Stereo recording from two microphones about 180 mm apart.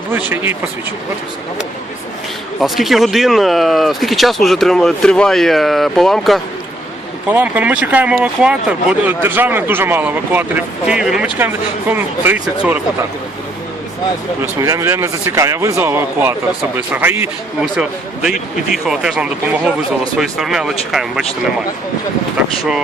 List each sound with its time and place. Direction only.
0.1 s speech: 10° right (ahead or behind)
2.6 s speech: centre (ahead or behind)
14.6 s speech: 15° right (ahead or behind)